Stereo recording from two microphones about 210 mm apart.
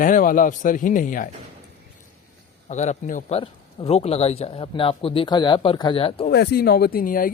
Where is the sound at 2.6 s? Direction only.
35° left (ahead or behind).